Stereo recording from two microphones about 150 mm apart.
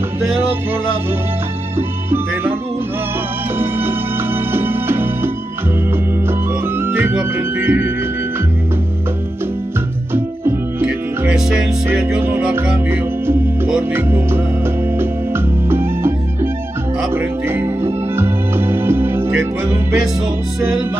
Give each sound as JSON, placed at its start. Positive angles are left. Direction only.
{"t": 1.8, "sound": "speech", "side_deg": -15}
{"t": 3.5, "sound": "music", "side_deg": -15}
{"t": 6.8, "sound": "music", "side_deg": -15}
{"t": 10.1, "sound": "music", "side_deg": -15}
{"t": 17.1, "sound": "music", "side_deg": -15}